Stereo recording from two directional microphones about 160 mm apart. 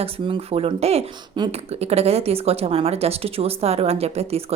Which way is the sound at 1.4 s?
30° right (ahead or behind).